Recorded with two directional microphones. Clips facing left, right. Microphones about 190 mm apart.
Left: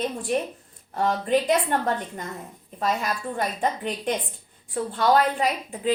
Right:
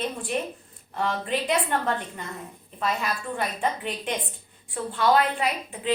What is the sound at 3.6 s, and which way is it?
A woman's voice, 40° left (ahead or behind).